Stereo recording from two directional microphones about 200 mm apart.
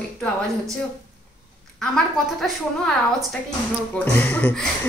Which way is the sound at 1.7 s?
5° left (ahead or behind).